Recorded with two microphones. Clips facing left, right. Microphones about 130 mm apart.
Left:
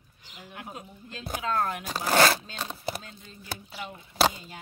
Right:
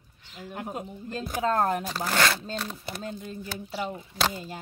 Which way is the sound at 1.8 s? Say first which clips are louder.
Left 3 dB; 45° left (ahead or behind).